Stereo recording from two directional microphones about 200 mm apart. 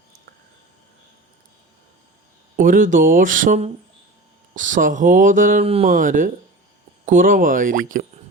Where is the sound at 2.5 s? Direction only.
40° right (ahead or behind).